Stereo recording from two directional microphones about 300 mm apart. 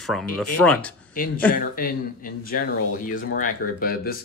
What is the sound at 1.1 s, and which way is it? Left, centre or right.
Speech, left.